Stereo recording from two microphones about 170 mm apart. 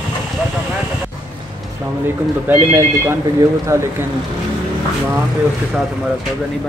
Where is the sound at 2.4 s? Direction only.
15° right (ahead or behind).